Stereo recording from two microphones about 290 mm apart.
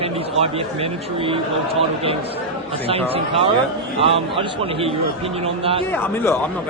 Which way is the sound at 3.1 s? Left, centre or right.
Centre.